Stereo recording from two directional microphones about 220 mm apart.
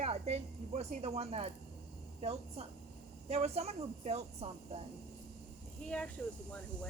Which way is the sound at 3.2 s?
30° right (ahead or behind).